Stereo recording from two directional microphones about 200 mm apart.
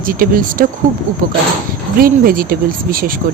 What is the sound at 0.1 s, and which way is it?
Speech, 45° right (ahead or behind).